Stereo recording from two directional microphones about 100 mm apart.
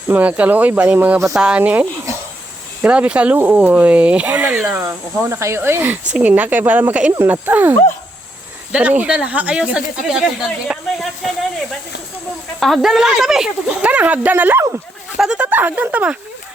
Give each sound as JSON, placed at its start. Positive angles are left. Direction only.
{"t": 0.1, "sound": "speech", "side_deg": -15}
{"t": 4.8, "sound": "speech", "side_deg": -25}
{"t": 12.5, "sound": "speech", "side_deg": 0}